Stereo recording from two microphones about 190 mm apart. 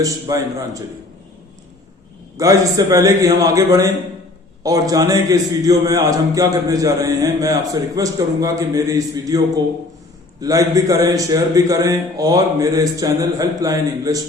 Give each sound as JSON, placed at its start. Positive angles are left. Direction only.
{"t": 0.0, "sound": "a man's voice", "side_deg": -20}
{"t": 2.4, "sound": "a man's voice", "side_deg": -15}
{"t": 10.4, "sound": "a man's voice", "side_deg": -20}